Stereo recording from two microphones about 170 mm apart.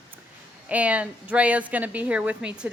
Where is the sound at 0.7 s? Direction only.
10° right (ahead or behind).